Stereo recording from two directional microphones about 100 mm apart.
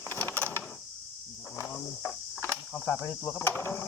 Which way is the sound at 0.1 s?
20° left (ahead or behind).